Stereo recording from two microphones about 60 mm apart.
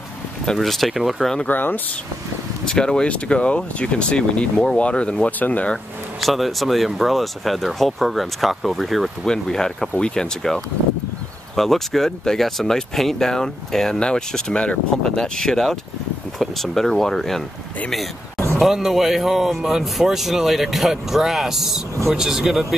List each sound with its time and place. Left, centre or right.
0.5 s a man's voice: centre
1.5 s speech: left
2.6 s speech: centre
6.2 s a man's voice: centre
18.6 s a man's voice: centre